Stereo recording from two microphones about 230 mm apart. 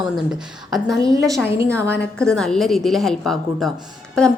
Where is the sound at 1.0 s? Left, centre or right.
Centre.